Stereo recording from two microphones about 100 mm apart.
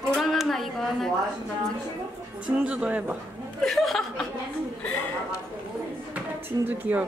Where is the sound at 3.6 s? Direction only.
Centre (ahead or behind).